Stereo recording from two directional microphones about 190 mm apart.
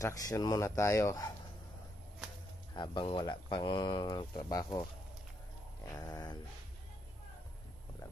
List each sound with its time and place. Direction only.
0.0 s speech: 15° left (ahead or behind)
2.7 s speech: 25° left (ahead or behind)
5.9 s speech: 20° left (ahead or behind)